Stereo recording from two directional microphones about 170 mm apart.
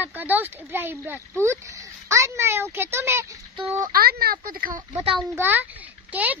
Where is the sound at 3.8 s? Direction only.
60° right (ahead or behind).